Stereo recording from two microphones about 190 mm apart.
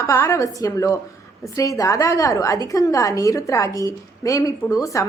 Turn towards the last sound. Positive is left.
turn(degrees=15)  # may be behind; listen again after turning